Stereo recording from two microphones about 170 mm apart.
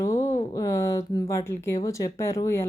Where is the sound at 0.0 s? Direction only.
15° left (ahead or behind).